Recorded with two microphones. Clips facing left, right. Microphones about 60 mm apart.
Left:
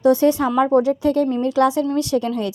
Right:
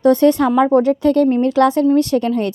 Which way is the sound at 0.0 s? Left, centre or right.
Right.